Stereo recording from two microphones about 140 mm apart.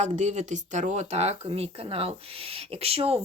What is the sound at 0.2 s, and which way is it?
Speech, 55° right (ahead or behind).